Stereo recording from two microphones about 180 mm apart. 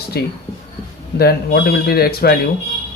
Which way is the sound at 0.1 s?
60° left (ahead or behind).